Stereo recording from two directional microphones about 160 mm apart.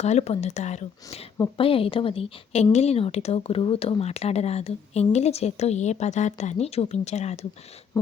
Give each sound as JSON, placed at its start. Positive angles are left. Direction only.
{"t": 0.0, "sound": "speech", "side_deg": 45}
{"t": 1.5, "sound": "speech", "side_deg": 35}